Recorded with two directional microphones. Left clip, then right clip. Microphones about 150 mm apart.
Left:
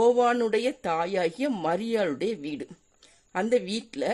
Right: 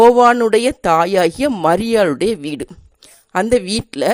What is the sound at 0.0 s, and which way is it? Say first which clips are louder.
A woman's voice: right 12 dB; 50° right (ahead or behind).